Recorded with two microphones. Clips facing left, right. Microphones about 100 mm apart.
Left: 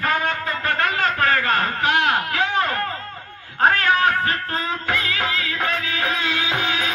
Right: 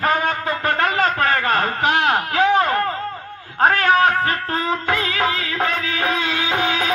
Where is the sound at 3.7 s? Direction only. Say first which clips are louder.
Right 3 dB; 35° right (ahead or behind).